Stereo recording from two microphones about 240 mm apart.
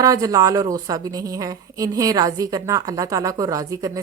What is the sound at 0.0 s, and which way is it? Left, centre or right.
A woman's voice, centre.